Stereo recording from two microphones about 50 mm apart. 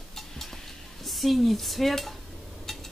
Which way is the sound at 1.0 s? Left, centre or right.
Centre.